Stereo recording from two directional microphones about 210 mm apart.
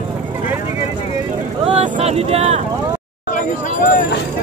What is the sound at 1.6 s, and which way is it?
Speech, 30° right (ahead or behind).